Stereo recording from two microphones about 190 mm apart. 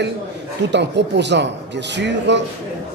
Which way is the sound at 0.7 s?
65° right (ahead or behind).